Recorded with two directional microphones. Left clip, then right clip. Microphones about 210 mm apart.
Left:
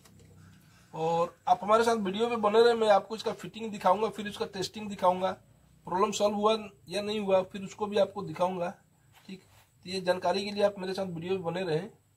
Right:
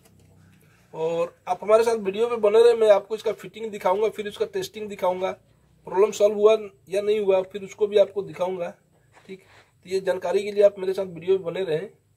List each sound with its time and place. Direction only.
0.9 s a man's voice: 35° right (ahead or behind)
10.0 s a man's voice: 30° right (ahead or behind)